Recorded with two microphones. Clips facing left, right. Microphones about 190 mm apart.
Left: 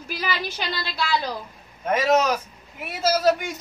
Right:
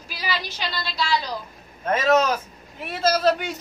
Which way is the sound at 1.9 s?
10° left (ahead or behind).